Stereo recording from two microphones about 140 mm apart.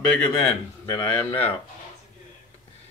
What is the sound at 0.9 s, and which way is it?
Speech, 20° left (ahead or behind).